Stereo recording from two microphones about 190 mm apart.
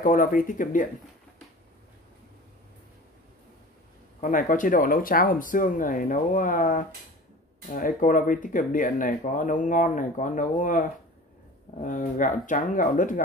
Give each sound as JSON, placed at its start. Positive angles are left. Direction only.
{"t": 0.0, "sound": "speech", "side_deg": 45}
{"t": 4.2, "sound": "speech", "side_deg": 45}